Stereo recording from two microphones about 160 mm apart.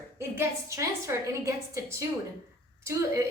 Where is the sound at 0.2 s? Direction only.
15° right (ahead or behind).